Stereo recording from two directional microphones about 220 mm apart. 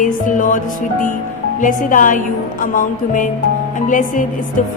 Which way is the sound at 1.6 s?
35° left (ahead or behind).